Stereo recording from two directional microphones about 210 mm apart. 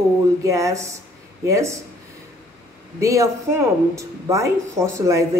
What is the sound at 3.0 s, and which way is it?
Speech, 15° right (ahead or behind).